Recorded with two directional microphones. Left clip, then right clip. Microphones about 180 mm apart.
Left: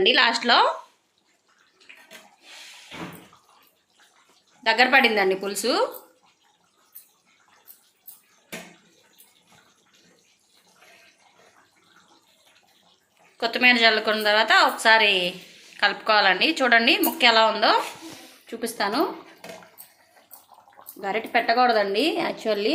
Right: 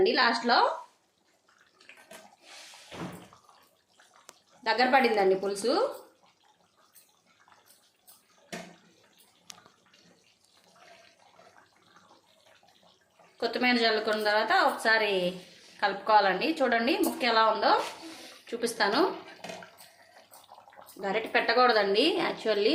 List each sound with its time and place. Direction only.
0.0 s a woman's voice: centre (ahead or behind)
4.6 s a woman's voice: centre (ahead or behind)
13.3 s a woman's voice: 5° left (ahead or behind)
21.0 s a woman's voice: 10° left (ahead or behind)